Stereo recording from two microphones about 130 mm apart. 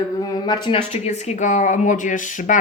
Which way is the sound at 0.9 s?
60° left (ahead or behind).